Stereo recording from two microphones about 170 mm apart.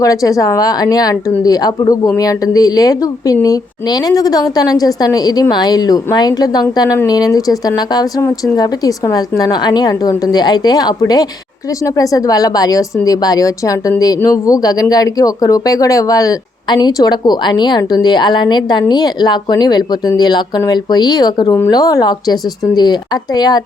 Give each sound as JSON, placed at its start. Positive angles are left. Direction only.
{"t": 0.0, "sound": "a woman's voice", "side_deg": 20}